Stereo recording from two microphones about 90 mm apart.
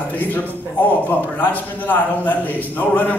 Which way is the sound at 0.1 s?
20° left (ahead or behind).